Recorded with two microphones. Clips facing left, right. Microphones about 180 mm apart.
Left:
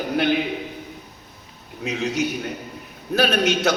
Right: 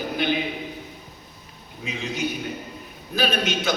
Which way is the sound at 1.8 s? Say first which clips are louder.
Left 5 dB; 75° left (ahead or behind).